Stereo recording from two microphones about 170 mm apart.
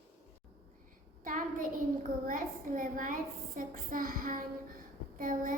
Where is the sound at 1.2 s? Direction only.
50° right (ahead or behind).